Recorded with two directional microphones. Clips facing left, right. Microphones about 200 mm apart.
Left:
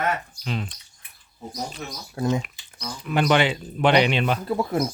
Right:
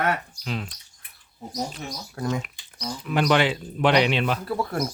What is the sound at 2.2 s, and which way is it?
Speech, 25° left (ahead or behind).